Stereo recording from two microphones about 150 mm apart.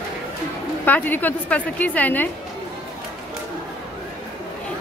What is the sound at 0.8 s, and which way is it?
A woman's voice, 10° left (ahead or behind).